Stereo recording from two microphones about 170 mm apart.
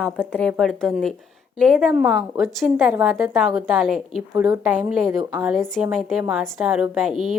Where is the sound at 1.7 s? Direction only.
5° right (ahead or behind).